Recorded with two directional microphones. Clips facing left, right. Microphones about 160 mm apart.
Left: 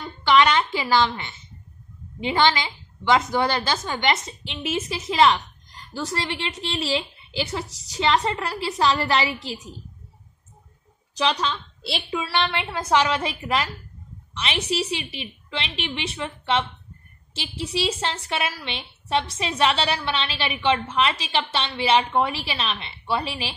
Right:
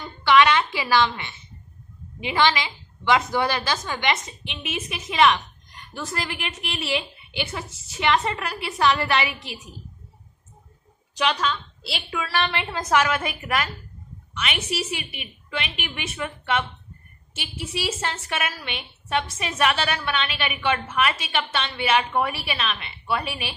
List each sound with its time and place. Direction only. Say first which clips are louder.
0.3 s a woman's voice: even; 25° left (ahead or behind)
11.9 s a woman's voice: left 2 dB; 25° left (ahead or behind)